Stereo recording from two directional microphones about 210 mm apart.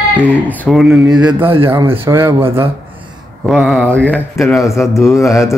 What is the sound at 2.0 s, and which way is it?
Speech, 10° right (ahead or behind).